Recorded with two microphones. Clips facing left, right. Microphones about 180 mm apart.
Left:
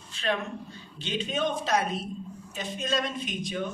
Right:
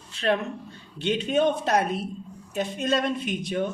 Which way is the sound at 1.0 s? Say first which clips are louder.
Right 7 dB; 65° right (ahead or behind).